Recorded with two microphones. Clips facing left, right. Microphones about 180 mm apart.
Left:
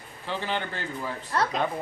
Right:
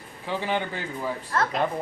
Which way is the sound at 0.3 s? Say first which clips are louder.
Right 3 dB; 10° right (ahead or behind).